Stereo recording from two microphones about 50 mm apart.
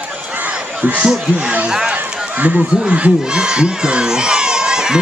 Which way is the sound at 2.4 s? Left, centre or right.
Right.